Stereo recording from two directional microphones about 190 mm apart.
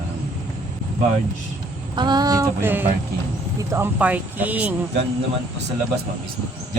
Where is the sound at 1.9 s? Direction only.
20° right (ahead or behind).